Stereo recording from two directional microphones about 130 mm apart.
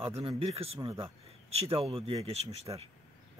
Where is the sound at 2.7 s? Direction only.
35° right (ahead or behind).